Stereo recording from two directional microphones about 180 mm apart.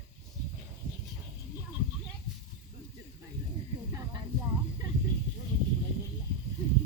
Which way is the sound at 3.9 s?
20° right (ahead or behind).